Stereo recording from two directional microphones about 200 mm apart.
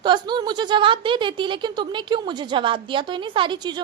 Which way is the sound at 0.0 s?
20° right (ahead or behind).